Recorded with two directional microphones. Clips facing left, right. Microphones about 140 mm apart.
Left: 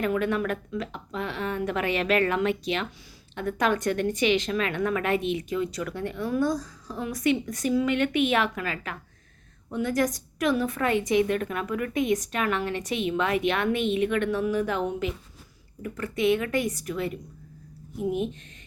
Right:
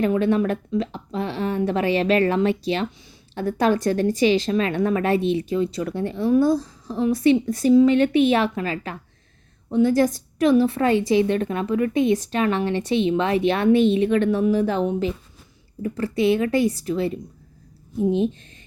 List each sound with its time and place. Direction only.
0.0 s a woman's voice: 30° right (ahead or behind)